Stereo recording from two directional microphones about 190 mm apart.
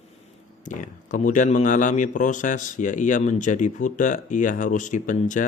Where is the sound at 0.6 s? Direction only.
40° left (ahead or behind).